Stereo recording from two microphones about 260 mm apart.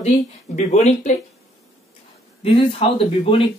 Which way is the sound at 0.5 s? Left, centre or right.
Left.